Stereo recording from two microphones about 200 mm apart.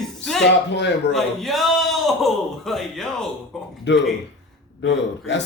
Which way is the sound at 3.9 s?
65° left (ahead or behind).